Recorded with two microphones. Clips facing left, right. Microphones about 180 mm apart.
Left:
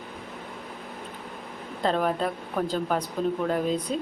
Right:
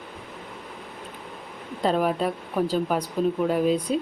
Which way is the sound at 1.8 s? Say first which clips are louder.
Right 2 dB; 10° right (ahead or behind).